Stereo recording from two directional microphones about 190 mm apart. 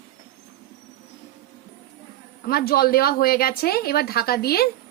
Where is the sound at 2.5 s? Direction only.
55° left (ahead or behind).